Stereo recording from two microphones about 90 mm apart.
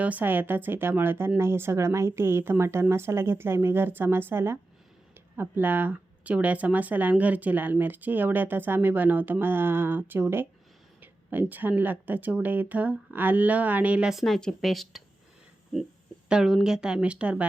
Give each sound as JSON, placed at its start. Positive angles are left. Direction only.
{"t": 0.0, "sound": "speech", "side_deg": -20}
{"t": 14.1, "sound": "speech", "side_deg": 0}